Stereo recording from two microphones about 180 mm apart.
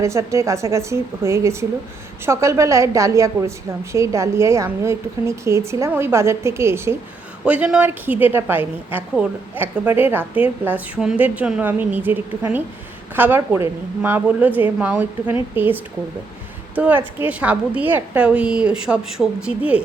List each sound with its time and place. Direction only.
0.0 s a woman's voice: 15° right (ahead or behind)